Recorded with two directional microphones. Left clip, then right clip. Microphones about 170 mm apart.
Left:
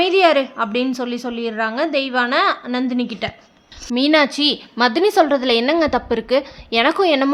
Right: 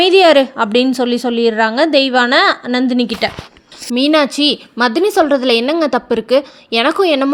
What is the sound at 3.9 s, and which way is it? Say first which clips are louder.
A woman's voice: right 3 dB; 20° right (ahead or behind).